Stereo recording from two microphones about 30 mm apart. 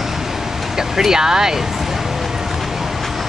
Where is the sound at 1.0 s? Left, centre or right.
Centre.